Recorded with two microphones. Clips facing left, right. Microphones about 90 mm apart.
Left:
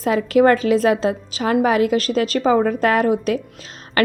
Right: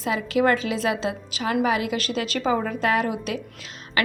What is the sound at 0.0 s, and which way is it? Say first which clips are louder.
A woman's voice: left 7 dB; 45° left (ahead or behind).